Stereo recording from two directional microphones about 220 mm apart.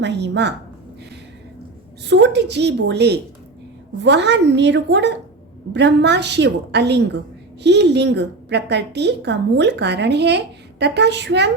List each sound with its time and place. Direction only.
0.0 s a woman's voice: 50° right (ahead or behind)
2.0 s a woman's voice: 50° right (ahead or behind)